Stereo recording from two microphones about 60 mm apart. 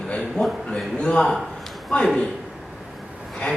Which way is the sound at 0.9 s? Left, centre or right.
Centre.